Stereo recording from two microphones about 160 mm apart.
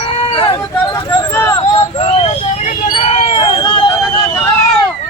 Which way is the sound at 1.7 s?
40° left (ahead or behind).